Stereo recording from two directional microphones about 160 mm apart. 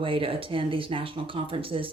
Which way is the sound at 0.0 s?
35° right (ahead or behind).